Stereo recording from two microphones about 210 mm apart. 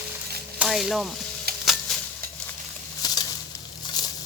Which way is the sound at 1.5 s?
45° right (ahead or behind).